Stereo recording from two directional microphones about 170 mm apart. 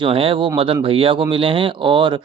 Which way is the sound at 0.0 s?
35° right (ahead or behind).